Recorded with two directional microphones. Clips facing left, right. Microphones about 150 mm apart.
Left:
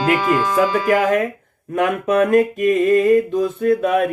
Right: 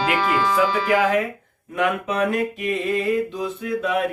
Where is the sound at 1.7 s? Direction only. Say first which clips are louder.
Left 6 dB; 50° left (ahead or behind).